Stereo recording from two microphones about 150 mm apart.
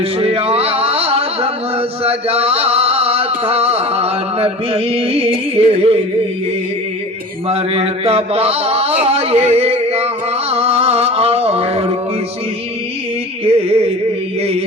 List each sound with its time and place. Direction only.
0.0 s music: 40° right (ahead or behind)
2.0 s chant: 40° right (ahead or behind)
7.4 s speech: 40° right (ahead or behind)
10.5 s music: 40° right (ahead or behind)
13.4 s music: 40° right (ahead or behind)